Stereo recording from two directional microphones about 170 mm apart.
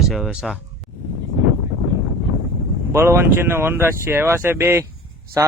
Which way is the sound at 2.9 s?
15° right (ahead or behind).